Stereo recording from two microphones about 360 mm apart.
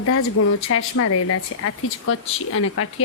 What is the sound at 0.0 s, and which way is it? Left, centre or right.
Speech, left.